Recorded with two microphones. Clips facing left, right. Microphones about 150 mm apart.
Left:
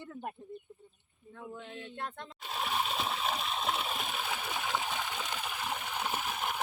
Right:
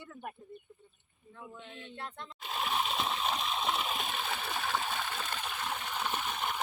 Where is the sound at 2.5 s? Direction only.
Centre (ahead or behind).